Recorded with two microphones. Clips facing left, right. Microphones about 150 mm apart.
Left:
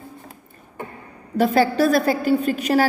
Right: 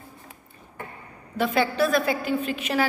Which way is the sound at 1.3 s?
40° left (ahead or behind).